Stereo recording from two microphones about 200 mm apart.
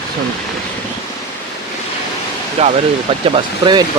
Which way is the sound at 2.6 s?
30° right (ahead or behind).